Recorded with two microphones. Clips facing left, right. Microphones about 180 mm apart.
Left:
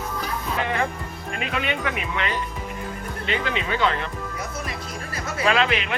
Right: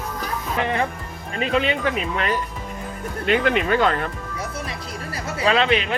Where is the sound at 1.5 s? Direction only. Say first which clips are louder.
Right 6 dB; 30° right (ahead or behind).